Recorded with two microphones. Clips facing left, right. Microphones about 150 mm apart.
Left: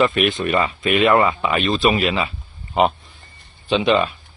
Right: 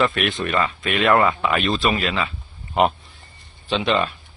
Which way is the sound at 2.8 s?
5° right (ahead or behind).